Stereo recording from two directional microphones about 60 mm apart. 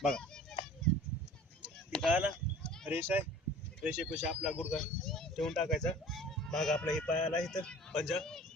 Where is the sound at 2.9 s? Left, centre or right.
Right.